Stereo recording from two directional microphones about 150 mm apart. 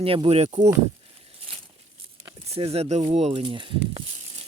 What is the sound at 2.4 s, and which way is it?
Speech, 40° right (ahead or behind).